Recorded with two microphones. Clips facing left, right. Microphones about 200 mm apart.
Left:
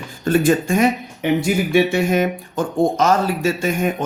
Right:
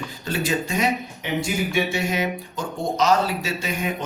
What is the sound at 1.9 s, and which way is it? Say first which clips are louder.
A man's voice: left 7 dB; 50° left (ahead or behind).